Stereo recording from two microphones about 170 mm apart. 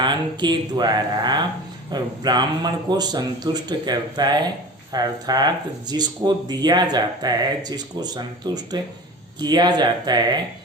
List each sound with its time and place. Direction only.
0.0 s speech: 25° right (ahead or behind)